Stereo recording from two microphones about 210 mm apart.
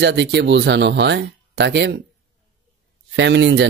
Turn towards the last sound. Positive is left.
turn(degrees=-55)  # may be behind; listen again after turning